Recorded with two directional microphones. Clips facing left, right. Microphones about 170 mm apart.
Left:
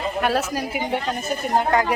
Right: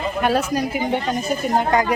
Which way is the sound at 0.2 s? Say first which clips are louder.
Right 4 dB; 5° left (ahead or behind).